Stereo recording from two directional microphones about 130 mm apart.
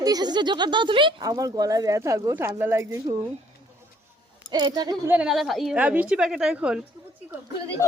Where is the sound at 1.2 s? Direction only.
25° right (ahead or behind).